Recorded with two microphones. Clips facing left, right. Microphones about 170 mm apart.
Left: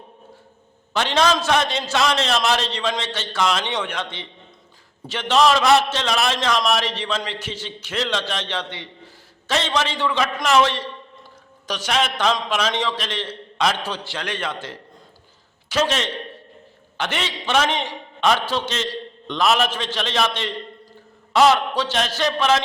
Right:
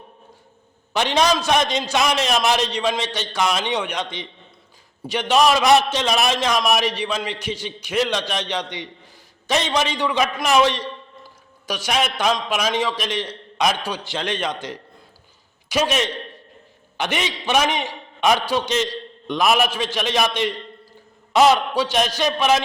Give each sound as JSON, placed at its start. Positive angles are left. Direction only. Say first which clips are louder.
{"t": 0.9, "sound": "a man's voice", "louder": "even", "side_deg": -15}